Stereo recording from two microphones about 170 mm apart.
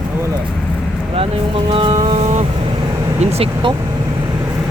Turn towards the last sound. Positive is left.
turn(degrees=-35)  # may be behind; listen again after turning